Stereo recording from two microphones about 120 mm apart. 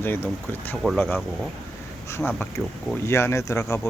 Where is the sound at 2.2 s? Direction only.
15° left (ahead or behind).